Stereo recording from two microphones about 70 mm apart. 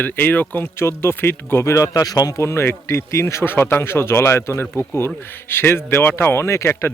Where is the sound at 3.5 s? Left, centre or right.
Left.